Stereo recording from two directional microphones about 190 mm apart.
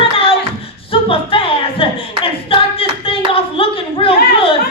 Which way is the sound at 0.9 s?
30° left (ahead or behind).